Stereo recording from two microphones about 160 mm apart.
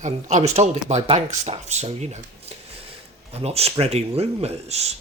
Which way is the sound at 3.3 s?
40° right (ahead or behind).